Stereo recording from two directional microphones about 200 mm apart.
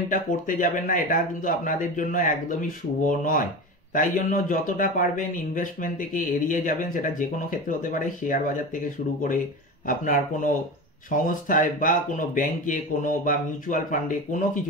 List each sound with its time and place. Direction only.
0.1 s speech: 40° left (ahead or behind)
9.8 s speech: 40° left (ahead or behind)